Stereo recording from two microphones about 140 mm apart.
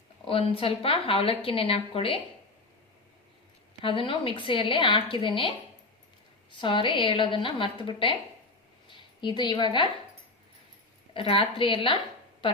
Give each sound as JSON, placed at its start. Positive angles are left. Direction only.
{"t": 0.3, "sound": "a woman's voice", "side_deg": 40}
{"t": 3.8, "sound": "a woman's voice", "side_deg": 40}
{"t": 11.1, "sound": "a woman's voice", "side_deg": 40}